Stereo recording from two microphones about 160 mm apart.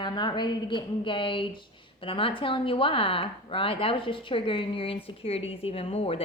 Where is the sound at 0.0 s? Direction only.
30° left (ahead or behind).